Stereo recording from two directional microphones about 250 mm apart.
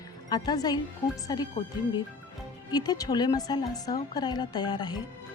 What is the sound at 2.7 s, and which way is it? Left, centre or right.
A woman's voice, centre.